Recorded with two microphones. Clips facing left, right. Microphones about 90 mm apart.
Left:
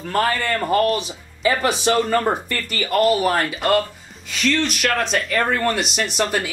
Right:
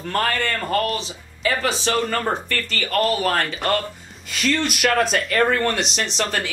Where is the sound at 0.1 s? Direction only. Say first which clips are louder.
Left 2 dB; 5° left (ahead or behind).